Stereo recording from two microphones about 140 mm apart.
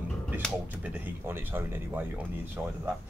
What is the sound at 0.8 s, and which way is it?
Speech, 15° right (ahead or behind).